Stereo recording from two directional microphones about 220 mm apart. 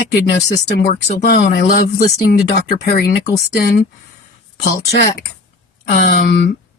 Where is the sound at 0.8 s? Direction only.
45° left (ahead or behind).